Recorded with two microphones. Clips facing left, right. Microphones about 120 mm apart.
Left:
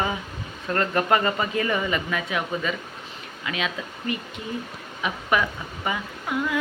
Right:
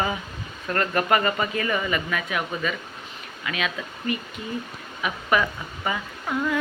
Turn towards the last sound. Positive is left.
turn(degrees=10)  # may be behind; listen again after turning